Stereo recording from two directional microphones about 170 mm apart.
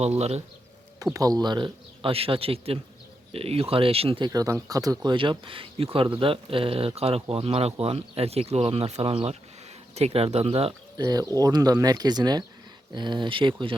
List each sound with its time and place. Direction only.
0.0 s speech: 40° right (ahead or behind)
1.1 s speech: 20° right (ahead or behind)
4.3 s speech: 20° right (ahead or behind); by 10.8 s 35° right (ahead or behind)
10.9 s speech: 25° right (ahead or behind)